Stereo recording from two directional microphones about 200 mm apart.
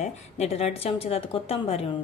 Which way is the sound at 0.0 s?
30° left (ahead or behind).